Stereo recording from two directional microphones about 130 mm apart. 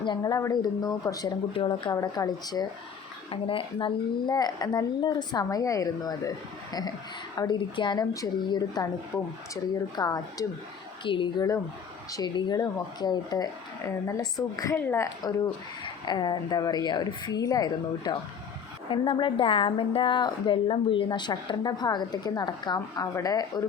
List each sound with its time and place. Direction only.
0.0 s speech: 35° left (ahead or behind)
1.5 s a woman's voice: 40° left (ahead or behind)
3.2 s a woman's voice: 45° left (ahead or behind)
9.9 s a woman's voice: 30° left (ahead or behind)